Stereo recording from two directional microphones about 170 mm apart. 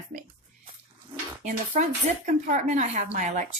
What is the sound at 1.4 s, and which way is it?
A woman's voice, 45° right (ahead or behind).